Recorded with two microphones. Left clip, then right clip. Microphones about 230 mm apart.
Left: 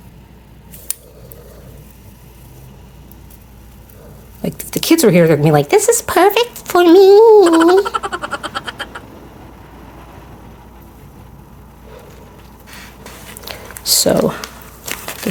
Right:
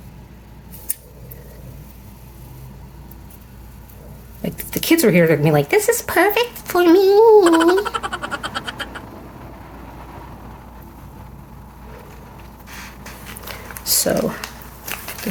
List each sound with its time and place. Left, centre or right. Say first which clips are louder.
4.4 s speech: left 4 dB; left
7.4 s a sound: left 4 dB; centre
13.8 s typing: left 6 dB; left